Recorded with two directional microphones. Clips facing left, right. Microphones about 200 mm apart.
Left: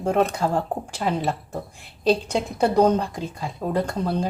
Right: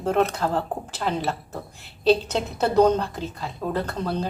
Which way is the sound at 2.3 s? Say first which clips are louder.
Left 2 dB; 10° left (ahead or behind).